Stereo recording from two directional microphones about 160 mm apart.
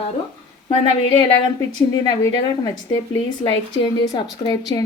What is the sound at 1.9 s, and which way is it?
A woman's voice, 25° left (ahead or behind).